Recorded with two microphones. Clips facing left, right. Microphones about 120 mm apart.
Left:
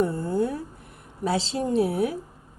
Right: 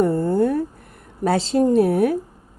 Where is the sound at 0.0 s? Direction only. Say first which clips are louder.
Right 6 dB; 55° right (ahead or behind).